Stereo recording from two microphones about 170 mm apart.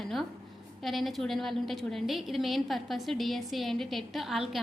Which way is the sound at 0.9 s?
Centre (ahead or behind).